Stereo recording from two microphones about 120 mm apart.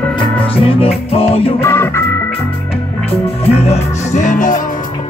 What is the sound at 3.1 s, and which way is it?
Music, 60° left (ahead or behind).